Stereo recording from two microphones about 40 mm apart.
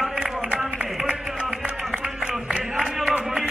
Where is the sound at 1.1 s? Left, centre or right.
Right.